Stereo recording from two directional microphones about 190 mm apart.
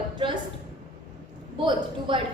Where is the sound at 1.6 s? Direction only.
25° right (ahead or behind).